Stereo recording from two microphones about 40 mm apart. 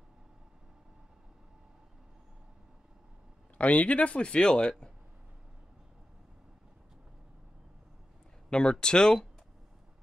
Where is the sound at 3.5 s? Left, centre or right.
Left.